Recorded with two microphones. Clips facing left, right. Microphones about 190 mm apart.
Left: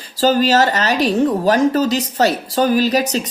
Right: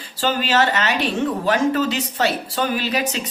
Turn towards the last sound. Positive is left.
turn(degrees=40)  # may be behind; listen again after turning